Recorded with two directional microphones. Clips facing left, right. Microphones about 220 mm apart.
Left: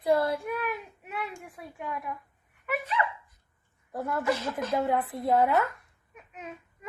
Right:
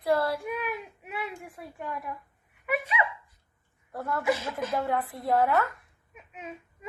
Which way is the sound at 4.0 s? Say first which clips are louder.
Even; 20° left (ahead or behind).